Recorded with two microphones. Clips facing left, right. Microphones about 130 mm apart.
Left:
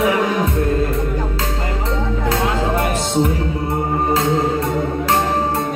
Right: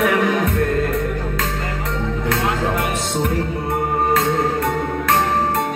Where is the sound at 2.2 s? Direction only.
30° left (ahead or behind).